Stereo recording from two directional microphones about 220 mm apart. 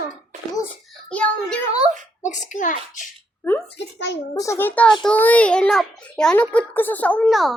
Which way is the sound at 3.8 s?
50° left (ahead or behind).